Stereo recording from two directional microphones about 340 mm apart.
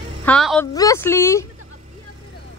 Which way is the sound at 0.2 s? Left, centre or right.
Centre.